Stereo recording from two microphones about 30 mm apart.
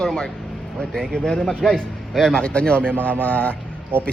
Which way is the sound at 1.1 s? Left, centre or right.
Left.